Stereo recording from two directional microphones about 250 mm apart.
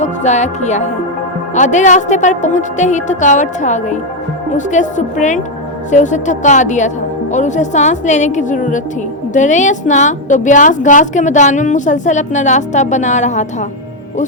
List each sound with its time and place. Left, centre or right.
0.0 s a woman's voice: left